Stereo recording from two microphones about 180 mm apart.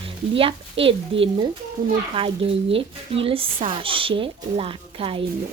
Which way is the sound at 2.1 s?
30° right (ahead or behind).